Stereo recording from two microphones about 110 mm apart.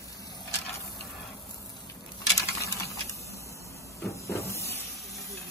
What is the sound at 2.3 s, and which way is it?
Typing, 30° left (ahead or behind).